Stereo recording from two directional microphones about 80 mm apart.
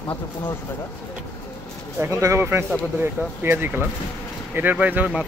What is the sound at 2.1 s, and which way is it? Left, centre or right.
Speech, right.